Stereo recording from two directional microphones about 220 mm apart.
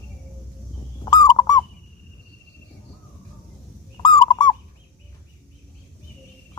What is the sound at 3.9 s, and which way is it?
Fowl, 20° left (ahead or behind).